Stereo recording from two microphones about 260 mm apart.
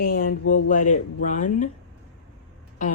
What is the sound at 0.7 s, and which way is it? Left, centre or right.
Speech, left.